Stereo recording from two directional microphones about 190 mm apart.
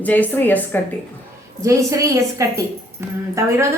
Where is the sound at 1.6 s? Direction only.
15° right (ahead or behind).